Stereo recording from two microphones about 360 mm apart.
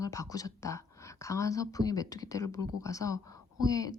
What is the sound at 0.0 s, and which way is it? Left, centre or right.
A woman's voice, centre.